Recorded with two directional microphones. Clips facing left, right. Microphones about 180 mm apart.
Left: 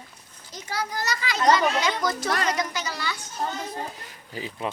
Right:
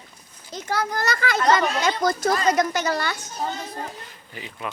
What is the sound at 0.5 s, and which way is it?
A child's voice, 55° right (ahead or behind).